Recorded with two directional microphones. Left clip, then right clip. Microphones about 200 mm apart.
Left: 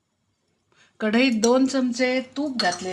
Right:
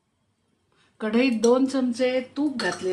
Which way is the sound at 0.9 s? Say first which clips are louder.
Left 2 dB; 55° left (ahead or behind).